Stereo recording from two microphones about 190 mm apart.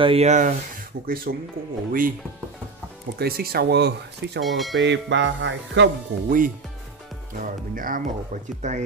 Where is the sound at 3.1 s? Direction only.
55° right (ahead or behind).